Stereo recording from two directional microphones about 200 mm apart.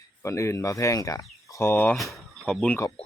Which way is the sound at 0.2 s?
15° left (ahead or behind).